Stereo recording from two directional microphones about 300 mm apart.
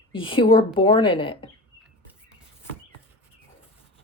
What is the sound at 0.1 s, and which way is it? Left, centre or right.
Speech, centre.